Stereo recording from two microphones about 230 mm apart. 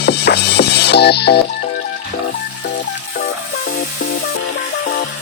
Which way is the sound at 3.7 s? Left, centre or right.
Left.